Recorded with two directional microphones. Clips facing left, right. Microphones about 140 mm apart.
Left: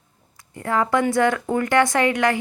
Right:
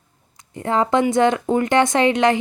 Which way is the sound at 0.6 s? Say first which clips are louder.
Right 2 dB; 25° right (ahead or behind).